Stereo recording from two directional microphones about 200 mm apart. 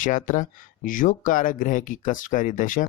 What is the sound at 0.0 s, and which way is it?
Speech, 40° left (ahead or behind).